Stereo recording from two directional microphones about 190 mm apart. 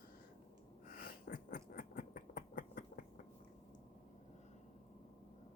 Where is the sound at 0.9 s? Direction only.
50° left (ahead or behind).